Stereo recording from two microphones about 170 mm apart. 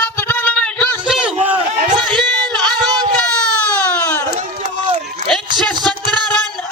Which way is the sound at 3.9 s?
10° left (ahead or behind).